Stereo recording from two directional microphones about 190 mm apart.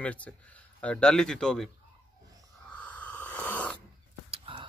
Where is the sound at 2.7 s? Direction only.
5° left (ahead or behind).